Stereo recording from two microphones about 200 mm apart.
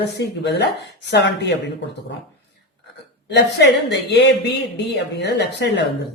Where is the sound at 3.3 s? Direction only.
60° left (ahead or behind).